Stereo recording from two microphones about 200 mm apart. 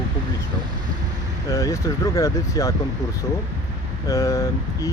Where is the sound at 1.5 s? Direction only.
15° left (ahead or behind).